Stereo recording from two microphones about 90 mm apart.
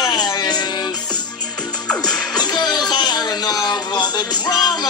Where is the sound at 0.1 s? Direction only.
50° left (ahead or behind).